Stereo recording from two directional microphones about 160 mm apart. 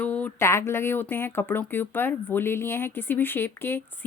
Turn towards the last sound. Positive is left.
turn(degrees=15)  # may be behind; listen again after turning